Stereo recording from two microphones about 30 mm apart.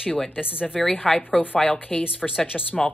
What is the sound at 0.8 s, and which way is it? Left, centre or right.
Speech, centre.